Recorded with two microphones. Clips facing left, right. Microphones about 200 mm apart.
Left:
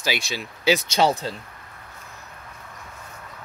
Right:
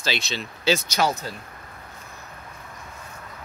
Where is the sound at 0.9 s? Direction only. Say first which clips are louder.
Left 3 dB; 30° left (ahead or behind).